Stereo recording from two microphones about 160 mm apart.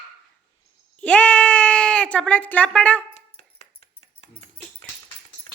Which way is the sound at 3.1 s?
45° left (ahead or behind).